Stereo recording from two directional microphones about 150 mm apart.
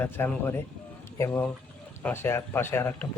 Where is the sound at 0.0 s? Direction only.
15° left (ahead or behind).